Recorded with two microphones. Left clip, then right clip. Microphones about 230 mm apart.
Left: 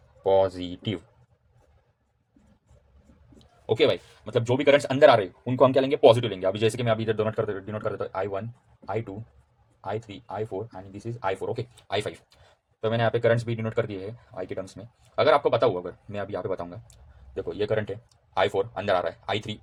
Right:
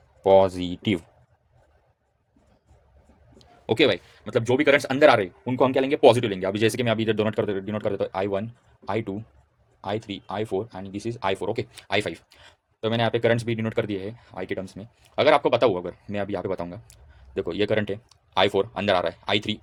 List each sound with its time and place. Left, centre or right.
0.2 s speech: right
3.3 s a man's voice: right